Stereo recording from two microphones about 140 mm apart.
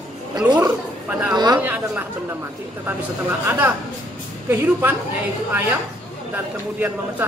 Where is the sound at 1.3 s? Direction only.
30° right (ahead or behind).